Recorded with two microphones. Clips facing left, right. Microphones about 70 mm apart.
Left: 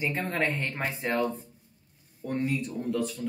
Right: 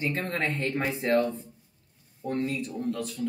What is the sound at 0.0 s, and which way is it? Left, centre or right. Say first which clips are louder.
Speech: even; centre.